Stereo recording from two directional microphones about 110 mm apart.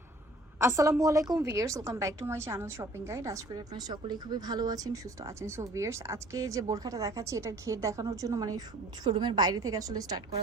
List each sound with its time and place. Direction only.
0.6 s a woman's voice: 25° right (ahead or behind)